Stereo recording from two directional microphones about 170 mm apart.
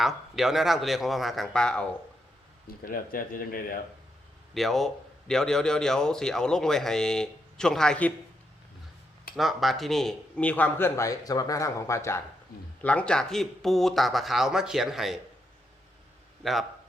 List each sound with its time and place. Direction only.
0.0 s speech: centre (ahead or behind)
2.6 s speech: 55° left (ahead or behind)
4.5 s speech: centre (ahead or behind)
9.3 s speech: centre (ahead or behind)
16.4 s speech: centre (ahead or behind)